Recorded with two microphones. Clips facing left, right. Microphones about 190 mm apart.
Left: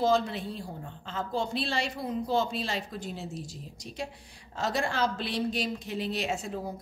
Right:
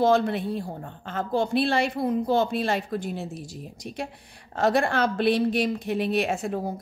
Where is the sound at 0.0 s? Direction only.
60° right (ahead or behind).